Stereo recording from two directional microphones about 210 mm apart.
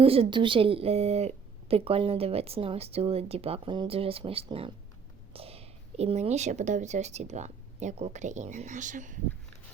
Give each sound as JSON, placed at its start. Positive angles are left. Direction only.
{"t": 0.0, "sound": "a woman's voice", "side_deg": -25}